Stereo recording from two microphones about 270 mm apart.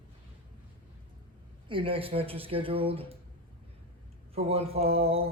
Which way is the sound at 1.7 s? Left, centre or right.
Centre.